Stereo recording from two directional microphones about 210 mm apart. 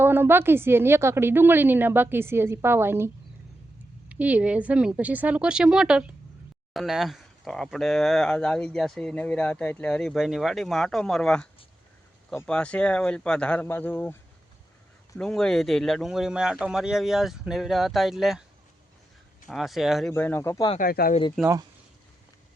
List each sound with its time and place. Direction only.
0.0 s a woman's voice: 10° right (ahead or behind)
4.1 s speech: 5° right (ahead or behind); by 14.2 s 10° left (ahead or behind)
15.2 s speech: 5° left (ahead or behind)
19.5 s speech: centre (ahead or behind)
20.7 s speech: 45° left (ahead or behind)
21.4 s speech: 5° left (ahead or behind)